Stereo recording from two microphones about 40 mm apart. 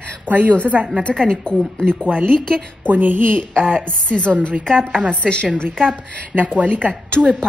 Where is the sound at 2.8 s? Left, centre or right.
Right.